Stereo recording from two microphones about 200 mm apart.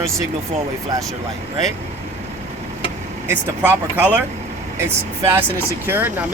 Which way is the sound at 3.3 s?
10° right (ahead or behind).